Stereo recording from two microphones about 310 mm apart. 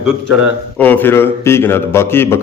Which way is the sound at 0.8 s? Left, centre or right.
Centre.